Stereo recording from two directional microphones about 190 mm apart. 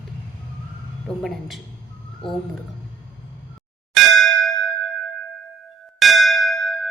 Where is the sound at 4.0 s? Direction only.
Centre (ahead or behind).